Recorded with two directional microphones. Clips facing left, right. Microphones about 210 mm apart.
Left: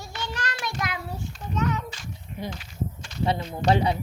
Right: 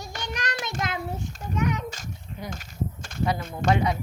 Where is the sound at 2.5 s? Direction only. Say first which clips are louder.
Right 1 dB; 45° right (ahead or behind).